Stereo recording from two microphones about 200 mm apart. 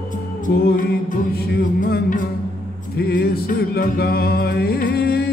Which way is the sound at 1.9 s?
40° left (ahead or behind).